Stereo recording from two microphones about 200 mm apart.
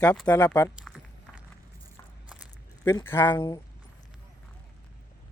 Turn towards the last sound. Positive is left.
turn(degrees=15)  # may be behind; listen again after turning